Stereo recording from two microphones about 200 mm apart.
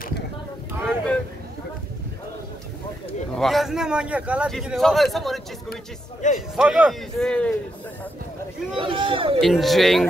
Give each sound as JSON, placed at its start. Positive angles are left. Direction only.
{"t": 0.8, "sound": "a sound", "side_deg": 5}
{"t": 3.3, "sound": "a man's voice", "side_deg": 0}
{"t": 8.7, "sound": "speech", "side_deg": -25}
{"t": 9.4, "sound": "a man's voice", "side_deg": 0}